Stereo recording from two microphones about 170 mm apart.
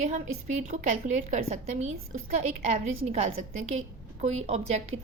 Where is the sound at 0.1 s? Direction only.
45° right (ahead or behind).